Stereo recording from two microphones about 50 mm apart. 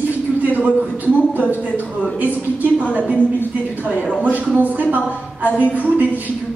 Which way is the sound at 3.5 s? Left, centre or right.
Right.